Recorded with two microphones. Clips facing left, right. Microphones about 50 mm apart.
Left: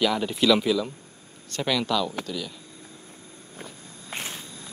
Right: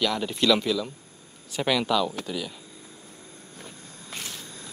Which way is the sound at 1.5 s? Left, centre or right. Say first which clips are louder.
Right 1 dB; centre.